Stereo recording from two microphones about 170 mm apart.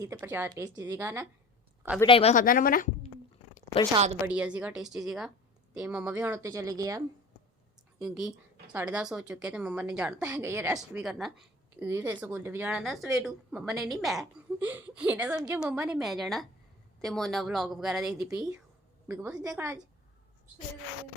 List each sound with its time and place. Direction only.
0.0 s a woman's voice: 15° right (ahead or behind)
0.5 s a woman's voice: 20° right (ahead or behind)
2.0 s speech: 35° left (ahead or behind)
2.3 s a woman's voice: 55° left (ahead or behind)
3.9 s a woman's voice: 40° right (ahead or behind)
4.3 s a woman's voice: 5° right (ahead or behind)
7.9 s a woman's voice: 5° right (ahead or behind)
11.0 s a woman's voice: centre (ahead or behind)